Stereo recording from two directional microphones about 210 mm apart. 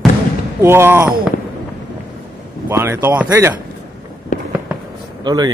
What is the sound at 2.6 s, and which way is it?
Speech, 10° right (ahead or behind).